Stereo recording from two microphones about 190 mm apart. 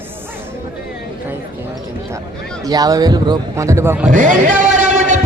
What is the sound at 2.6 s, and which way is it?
A man's voice, 20° right (ahead or behind).